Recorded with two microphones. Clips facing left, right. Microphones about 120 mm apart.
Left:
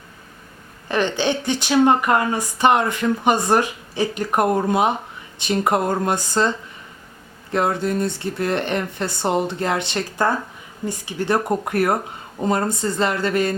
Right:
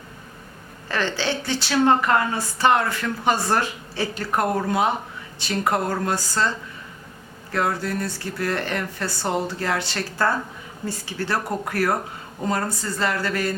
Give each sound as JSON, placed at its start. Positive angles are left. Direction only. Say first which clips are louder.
{"t": 0.9, "sound": "a woman's voice", "louder": "left 4 dB", "side_deg": 20}
{"t": 7.5, "sound": "speech", "louder": "left 4 dB", "side_deg": 20}